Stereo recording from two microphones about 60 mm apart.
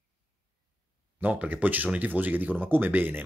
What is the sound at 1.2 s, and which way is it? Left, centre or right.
Speech, right.